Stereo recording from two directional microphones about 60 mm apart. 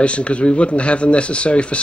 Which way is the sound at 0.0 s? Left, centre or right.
Centre.